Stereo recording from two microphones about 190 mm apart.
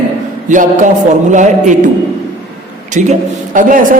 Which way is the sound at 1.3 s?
40° right (ahead or behind).